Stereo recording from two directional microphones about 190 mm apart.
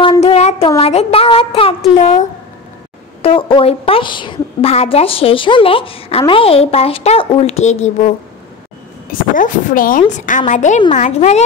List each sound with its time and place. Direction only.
0.0 s child singing: 30° left (ahead or behind)
0.7 s a woman's voice: 30° left (ahead or behind)
9.3 s a woman's voice: 45° left (ahead or behind)